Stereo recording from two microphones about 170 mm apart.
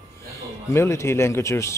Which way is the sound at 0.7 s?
15° left (ahead or behind).